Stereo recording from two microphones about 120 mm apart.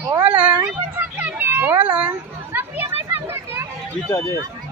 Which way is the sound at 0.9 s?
15° right (ahead or behind).